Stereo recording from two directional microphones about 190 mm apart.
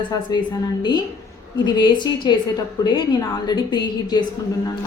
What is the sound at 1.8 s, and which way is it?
Speech, 25° left (ahead or behind).